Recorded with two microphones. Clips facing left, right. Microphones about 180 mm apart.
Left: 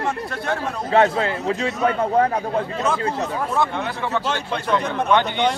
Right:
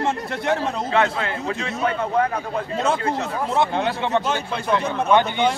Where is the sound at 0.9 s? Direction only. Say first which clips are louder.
Left 6 dB; 35° left (ahead or behind).